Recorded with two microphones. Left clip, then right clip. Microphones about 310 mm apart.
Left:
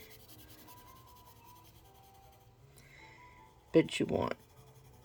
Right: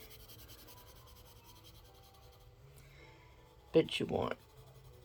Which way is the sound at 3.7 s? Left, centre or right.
Centre.